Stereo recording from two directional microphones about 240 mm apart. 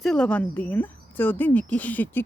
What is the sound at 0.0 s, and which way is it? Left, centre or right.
A woman's voice, centre.